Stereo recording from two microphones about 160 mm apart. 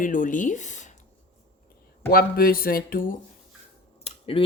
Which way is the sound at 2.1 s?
70° left (ahead or behind).